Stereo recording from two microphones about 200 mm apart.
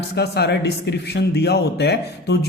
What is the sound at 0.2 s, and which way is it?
A man's voice, 55° left (ahead or behind).